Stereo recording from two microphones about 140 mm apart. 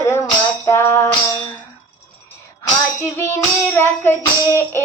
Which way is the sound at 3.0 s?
20° left (ahead or behind).